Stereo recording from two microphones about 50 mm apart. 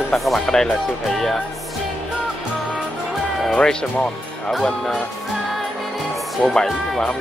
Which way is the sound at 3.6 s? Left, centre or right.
Centre.